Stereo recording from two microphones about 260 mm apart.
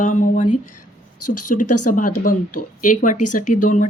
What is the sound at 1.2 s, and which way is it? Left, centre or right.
Speech, left.